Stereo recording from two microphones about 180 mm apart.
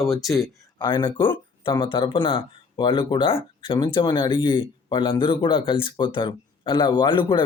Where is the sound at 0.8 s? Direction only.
25° left (ahead or behind).